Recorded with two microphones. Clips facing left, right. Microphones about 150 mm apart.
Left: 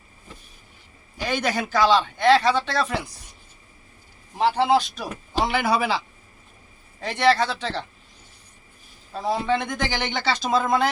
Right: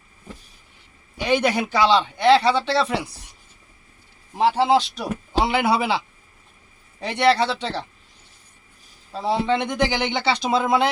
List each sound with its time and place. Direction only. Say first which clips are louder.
1.2 s speech: right 5 dB; 20° right (ahead or behind)
4.4 s speech: right 2 dB; 30° right (ahead or behind)
7.3 s speech: right 1 dB; 25° right (ahead or behind)
9.1 s speech: right 2 dB; 25° right (ahead or behind)